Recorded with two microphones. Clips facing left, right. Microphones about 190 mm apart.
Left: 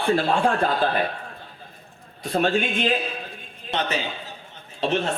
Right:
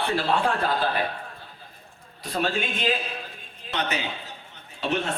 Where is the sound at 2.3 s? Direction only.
45° left (ahead or behind).